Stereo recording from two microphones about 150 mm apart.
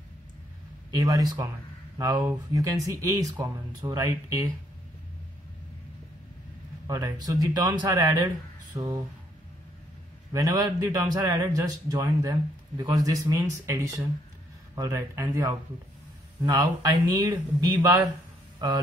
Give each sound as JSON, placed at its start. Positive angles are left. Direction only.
{"t": 0.9, "sound": "a man's voice", "side_deg": -25}
{"t": 6.9, "sound": "a man's voice", "side_deg": -25}
{"t": 10.3, "sound": "a man's voice", "side_deg": -25}